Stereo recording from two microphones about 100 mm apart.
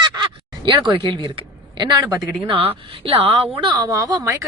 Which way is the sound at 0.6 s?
55° right (ahead or behind).